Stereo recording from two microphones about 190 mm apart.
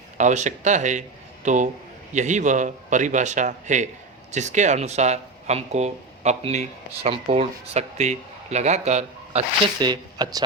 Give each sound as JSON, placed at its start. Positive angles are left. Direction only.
{"t": 0.2, "sound": "speech", "side_deg": -40}
{"t": 9.8, "sound": "speech", "side_deg": -20}